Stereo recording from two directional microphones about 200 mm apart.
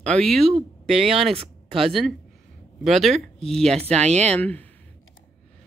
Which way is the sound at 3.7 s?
30° right (ahead or behind).